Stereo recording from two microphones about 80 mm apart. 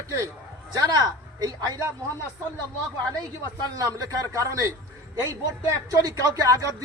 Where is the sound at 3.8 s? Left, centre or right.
Right.